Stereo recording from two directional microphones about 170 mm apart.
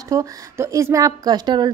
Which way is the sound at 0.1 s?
20° right (ahead or behind).